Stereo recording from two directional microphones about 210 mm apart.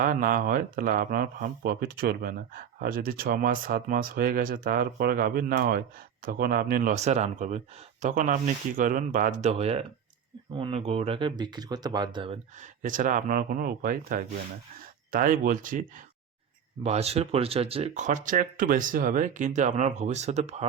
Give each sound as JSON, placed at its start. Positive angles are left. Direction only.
{"t": 0.0, "sound": "speech", "side_deg": -40}
{"t": 12.5, "sound": "speech", "side_deg": -35}
{"t": 16.8, "sound": "speech", "side_deg": -30}